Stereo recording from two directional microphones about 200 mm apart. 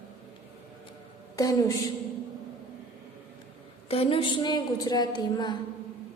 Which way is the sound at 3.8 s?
30° left (ahead or behind).